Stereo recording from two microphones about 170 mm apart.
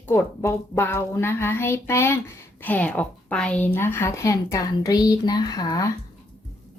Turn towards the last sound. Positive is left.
turn(degrees=20)  # may be behind; listen again after turning